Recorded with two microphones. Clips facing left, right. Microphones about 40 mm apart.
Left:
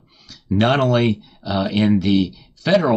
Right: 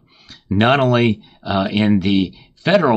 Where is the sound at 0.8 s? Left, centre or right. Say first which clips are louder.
Right 2 dB; centre.